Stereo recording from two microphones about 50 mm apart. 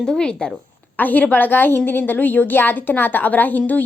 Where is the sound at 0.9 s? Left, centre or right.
Left.